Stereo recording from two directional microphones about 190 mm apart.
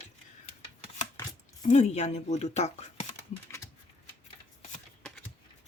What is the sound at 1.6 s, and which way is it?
Speech, 35° left (ahead or behind).